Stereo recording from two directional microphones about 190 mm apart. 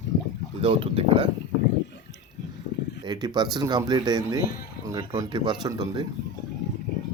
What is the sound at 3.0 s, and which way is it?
Speech, 20° right (ahead or behind).